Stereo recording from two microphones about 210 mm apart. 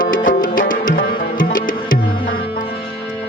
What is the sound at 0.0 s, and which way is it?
Music, 40° left (ahead or behind).